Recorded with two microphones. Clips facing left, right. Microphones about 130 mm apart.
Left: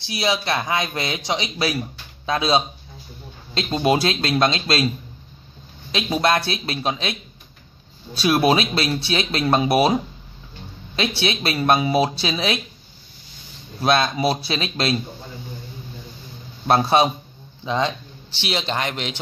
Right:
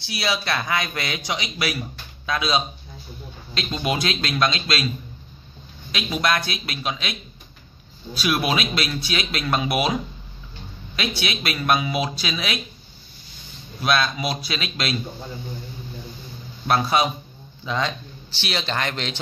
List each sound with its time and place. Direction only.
0.0 s speech: 20° left (ahead or behind)
13.7 s speech: 30° left (ahead or behind)
16.6 s speech: 30° left (ahead or behind)